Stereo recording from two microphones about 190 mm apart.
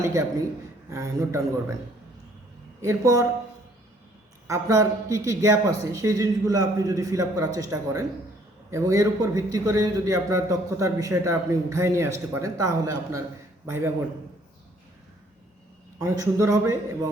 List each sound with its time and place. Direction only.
0.0 s a man's voice: 15° right (ahead or behind)
2.8 s a man's voice: 15° right (ahead or behind)
4.4 s a man's voice: 15° right (ahead or behind)
16.0 s a man's voice: 15° right (ahead or behind)